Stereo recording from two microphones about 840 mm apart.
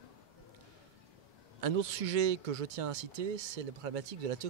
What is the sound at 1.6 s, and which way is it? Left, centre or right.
Speech, right.